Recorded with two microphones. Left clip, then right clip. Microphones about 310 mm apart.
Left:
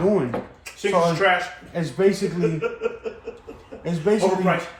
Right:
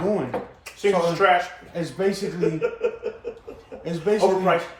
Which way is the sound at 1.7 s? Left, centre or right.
Left.